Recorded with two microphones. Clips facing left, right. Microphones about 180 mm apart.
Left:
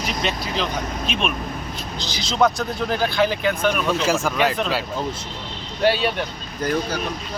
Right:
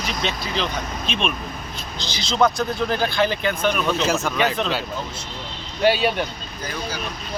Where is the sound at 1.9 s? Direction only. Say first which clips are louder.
Right 2 dB; 35° left (ahead or behind).